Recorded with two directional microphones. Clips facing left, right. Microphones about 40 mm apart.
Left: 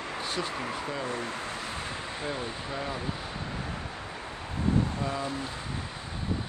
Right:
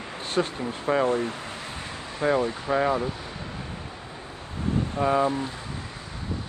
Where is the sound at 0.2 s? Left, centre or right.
Right.